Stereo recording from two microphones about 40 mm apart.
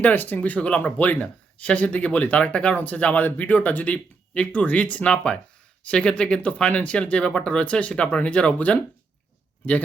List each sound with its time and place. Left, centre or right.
0.0 s speech: left
2.7 s speech: left
5.0 s speech: left